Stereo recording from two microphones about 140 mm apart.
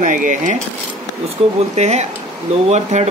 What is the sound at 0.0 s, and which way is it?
Speech, 70° right (ahead or behind).